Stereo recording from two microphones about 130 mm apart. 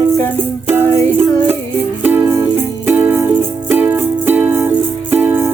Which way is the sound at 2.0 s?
20° right (ahead or behind).